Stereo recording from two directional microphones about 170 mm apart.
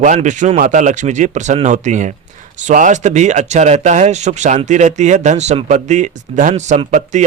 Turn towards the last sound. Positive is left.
turn(degrees=-45)  # may be behind; listen again after turning